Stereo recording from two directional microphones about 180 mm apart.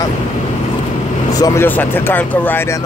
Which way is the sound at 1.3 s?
20° left (ahead or behind).